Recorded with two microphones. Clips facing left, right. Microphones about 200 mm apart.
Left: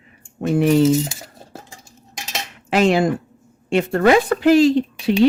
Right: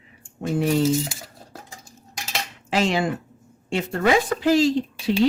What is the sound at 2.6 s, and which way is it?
Speech, 55° left (ahead or behind).